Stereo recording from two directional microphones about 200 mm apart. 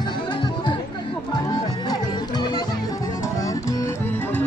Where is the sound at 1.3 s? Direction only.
20° left (ahead or behind).